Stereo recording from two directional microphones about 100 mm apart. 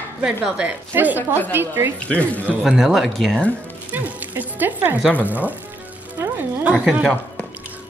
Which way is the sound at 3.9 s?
15° right (ahead or behind).